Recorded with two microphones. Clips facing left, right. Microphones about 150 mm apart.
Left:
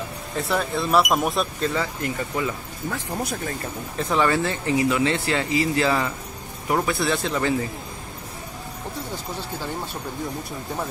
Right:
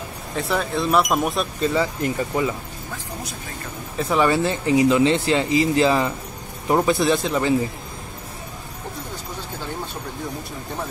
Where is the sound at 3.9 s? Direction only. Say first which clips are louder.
Right 2 dB; 5° right (ahead or behind).